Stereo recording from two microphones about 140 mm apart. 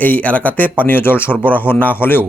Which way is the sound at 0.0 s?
10° left (ahead or behind).